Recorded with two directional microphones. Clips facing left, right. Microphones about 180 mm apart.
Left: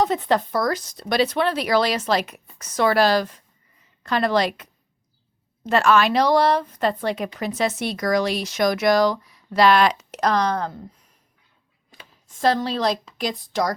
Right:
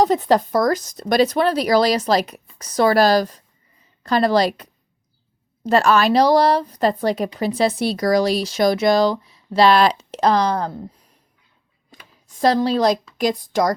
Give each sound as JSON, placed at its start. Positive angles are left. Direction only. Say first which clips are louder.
{"t": 0.0, "sound": "a woman's voice", "louder": "right 4 dB", "side_deg": -35}
{"t": 12.3, "sound": "a woman's voice", "louder": "right 4 dB", "side_deg": -40}